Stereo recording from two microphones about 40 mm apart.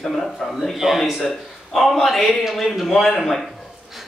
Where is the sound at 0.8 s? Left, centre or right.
Centre.